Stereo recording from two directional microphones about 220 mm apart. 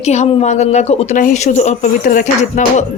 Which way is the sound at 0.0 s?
30° left (ahead or behind).